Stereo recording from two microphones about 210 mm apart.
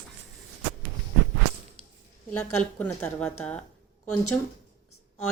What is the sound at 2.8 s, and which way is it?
Speech, 10° left (ahead or behind).